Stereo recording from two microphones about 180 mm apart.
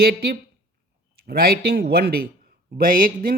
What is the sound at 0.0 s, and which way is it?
Speech, 60° right (ahead or behind).